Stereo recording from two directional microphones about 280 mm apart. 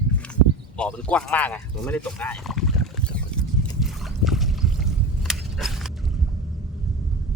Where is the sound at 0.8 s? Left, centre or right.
Centre.